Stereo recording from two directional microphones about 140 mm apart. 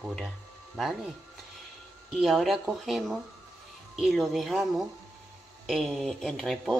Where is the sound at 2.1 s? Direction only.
Centre (ahead or behind).